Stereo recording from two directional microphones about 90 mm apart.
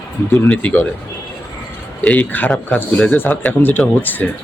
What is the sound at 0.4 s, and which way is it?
Speech, 15° left (ahead or behind).